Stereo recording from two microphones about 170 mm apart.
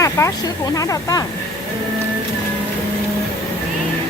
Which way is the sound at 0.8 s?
20° left (ahead or behind).